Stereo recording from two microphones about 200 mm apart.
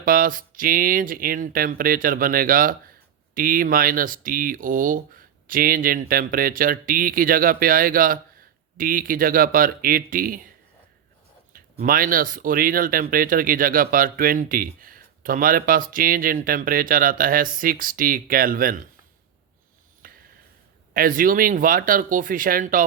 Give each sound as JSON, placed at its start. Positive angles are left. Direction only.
{"t": 0.0, "sound": "speech", "side_deg": -45}
{"t": 11.5, "sound": "speech", "side_deg": -45}
{"t": 20.0, "sound": "a sound", "side_deg": -45}
{"t": 20.9, "sound": "speech", "side_deg": -45}